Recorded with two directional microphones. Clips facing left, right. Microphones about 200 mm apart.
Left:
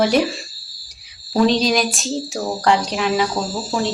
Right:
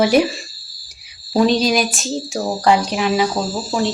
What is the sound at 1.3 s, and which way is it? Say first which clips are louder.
Speech: right 1 dB; 5° right (ahead or behind).